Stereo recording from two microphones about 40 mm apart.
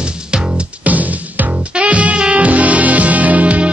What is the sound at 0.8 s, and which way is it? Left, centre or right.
Music, right.